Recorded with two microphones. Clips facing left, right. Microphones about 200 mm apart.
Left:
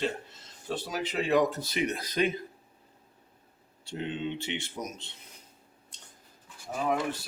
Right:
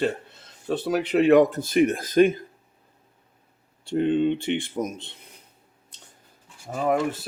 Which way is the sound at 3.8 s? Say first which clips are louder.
Right 13 dB; 55° right (ahead or behind).